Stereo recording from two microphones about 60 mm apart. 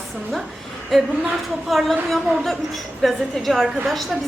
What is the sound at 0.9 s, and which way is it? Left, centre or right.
A woman's voice, centre.